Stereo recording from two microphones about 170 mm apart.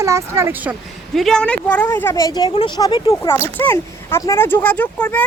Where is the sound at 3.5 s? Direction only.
15° left (ahead or behind).